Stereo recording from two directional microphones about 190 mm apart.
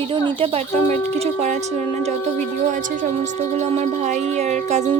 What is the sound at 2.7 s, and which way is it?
Speech, 45° right (ahead or behind).